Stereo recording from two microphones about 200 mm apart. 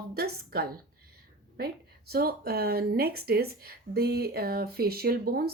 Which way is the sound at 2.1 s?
50° right (ahead or behind).